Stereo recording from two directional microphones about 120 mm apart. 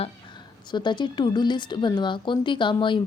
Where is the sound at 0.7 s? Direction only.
40° left (ahead or behind).